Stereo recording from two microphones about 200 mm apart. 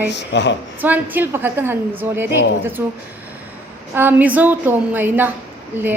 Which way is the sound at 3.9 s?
10° right (ahead or behind).